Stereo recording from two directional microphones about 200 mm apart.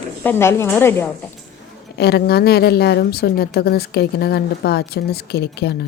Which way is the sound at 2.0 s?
55° left (ahead or behind).